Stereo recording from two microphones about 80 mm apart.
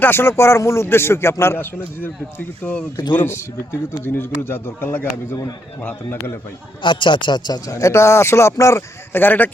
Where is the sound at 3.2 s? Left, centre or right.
Left.